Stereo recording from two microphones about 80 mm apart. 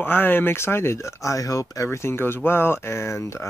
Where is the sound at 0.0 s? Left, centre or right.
Left.